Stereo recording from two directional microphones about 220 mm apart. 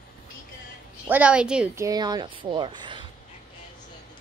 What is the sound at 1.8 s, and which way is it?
A woman's voice, 15° right (ahead or behind).